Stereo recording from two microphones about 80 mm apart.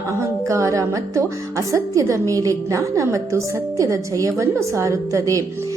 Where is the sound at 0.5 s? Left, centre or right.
Right.